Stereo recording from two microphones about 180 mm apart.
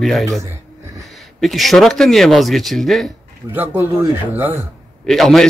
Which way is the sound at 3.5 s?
10° right (ahead or behind).